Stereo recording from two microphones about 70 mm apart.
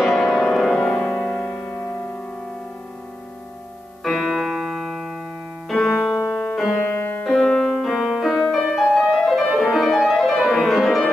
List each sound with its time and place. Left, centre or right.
0.0 s music: centre
4.0 s music: centre
5.7 s music: centre
6.8 s music: left
7.2 s music: centre